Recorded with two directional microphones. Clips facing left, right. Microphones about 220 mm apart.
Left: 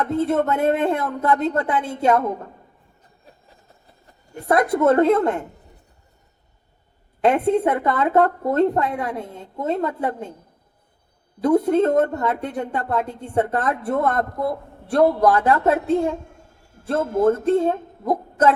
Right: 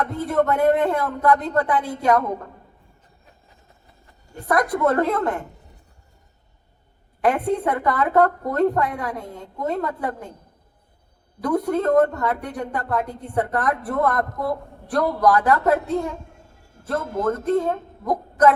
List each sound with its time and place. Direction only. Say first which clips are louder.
0.0 s a woman's voice: left 2 dB; 25° left (ahead or behind)
4.4 s a woman's voice: left 3 dB; 25° left (ahead or behind)
7.2 s a woman's voice: left 3 dB; 25° left (ahead or behind)
11.3 s a woman's voice: left 5 dB; 25° left (ahead or behind)
16.8 s speech: left 5 dB; 30° left (ahead or behind)